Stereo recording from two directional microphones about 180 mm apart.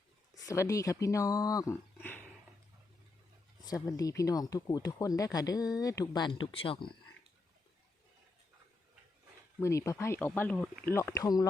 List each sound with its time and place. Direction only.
0.4 s speech: 15° left (ahead or behind)
3.6 s speech: 20° left (ahead or behind)
9.6 s speech: 15° left (ahead or behind)